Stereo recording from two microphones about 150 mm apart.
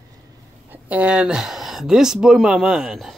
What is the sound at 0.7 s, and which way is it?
Speech, 10° right (ahead or behind).